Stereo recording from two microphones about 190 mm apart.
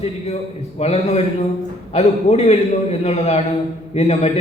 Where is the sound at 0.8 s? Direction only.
35° left (ahead or behind).